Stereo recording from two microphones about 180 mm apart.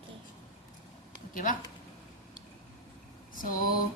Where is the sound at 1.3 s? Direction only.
45° left (ahead or behind).